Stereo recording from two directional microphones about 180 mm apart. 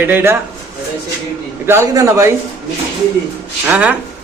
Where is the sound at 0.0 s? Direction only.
10° right (ahead or behind).